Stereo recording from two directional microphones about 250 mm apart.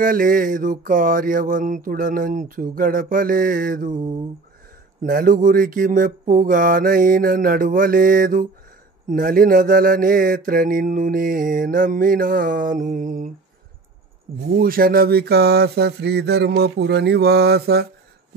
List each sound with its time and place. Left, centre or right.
0.0 s mantra: right
3.9 s a sound: centre
5.0 s mantra: right
14.5 s mantra: right